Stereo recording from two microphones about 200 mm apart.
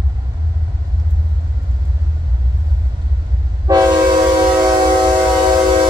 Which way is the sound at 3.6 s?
20° right (ahead or behind).